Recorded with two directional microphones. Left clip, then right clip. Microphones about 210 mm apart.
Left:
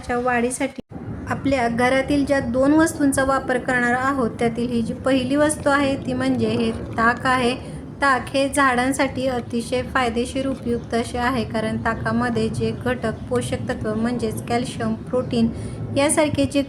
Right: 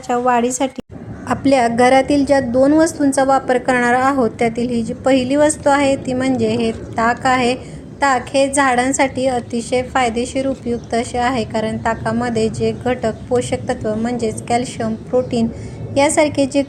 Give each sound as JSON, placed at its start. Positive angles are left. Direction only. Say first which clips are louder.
{"t": 0.1, "sound": "a woman's voice", "louder": "right 6 dB", "side_deg": -20}